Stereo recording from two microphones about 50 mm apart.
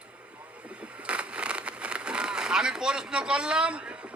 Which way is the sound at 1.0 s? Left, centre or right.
Right.